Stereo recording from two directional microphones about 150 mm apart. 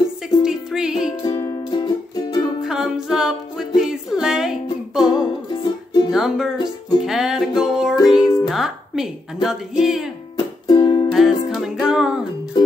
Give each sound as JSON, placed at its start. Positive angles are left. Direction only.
{"t": 0.4, "sound": "music", "side_deg": -5}
{"t": 1.2, "sound": "music", "side_deg": 25}
{"t": 2.6, "sound": "music", "side_deg": -5}
{"t": 5.1, "sound": "music", "side_deg": 30}
{"t": 6.1, "sound": "music", "side_deg": -5}
{"t": 10.3, "sound": "music", "side_deg": 30}
{"t": 11.1, "sound": "music", "side_deg": 0}
{"t": 12.6, "sound": "music", "side_deg": 30}